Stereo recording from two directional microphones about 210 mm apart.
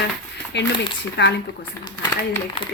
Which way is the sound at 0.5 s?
55° left (ahead or behind).